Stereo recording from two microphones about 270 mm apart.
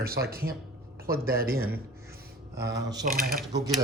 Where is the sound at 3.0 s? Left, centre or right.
Right.